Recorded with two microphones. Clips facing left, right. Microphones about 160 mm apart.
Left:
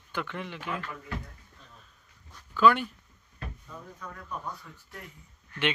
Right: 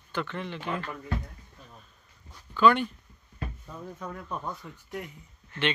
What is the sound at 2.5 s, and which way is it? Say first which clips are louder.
Speech: right 1 dB; 5° left (ahead or behind).